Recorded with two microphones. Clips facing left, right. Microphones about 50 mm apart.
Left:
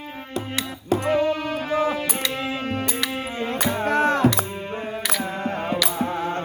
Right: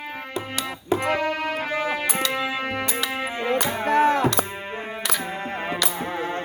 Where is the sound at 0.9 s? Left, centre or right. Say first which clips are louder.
Left 3 dB; right.